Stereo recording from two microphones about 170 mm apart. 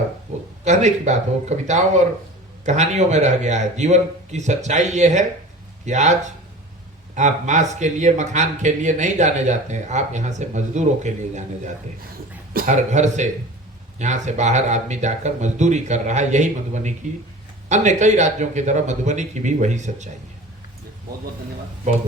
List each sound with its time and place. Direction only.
0.6 s speech: 45° right (ahead or behind)